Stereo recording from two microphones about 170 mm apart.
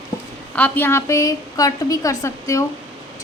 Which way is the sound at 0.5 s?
10° left (ahead or behind).